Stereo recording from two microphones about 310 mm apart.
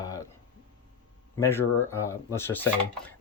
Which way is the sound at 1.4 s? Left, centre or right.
Centre.